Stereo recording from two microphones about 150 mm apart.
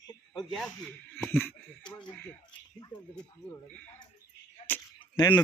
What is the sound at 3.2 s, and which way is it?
Speech, 5° left (ahead or behind).